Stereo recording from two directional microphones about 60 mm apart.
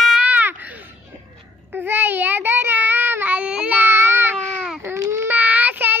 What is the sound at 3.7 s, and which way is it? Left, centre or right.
Baby cry, right.